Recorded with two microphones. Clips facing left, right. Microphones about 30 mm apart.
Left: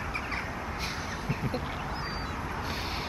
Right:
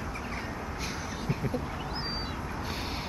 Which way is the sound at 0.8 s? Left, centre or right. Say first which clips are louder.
Right 1 dB; centre.